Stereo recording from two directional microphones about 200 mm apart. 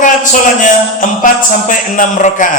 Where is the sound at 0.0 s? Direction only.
40° left (ahead or behind).